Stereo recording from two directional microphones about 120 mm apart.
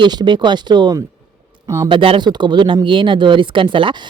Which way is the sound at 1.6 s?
25° right (ahead or behind).